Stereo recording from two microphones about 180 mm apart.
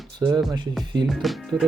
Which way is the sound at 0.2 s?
25° right (ahead or behind).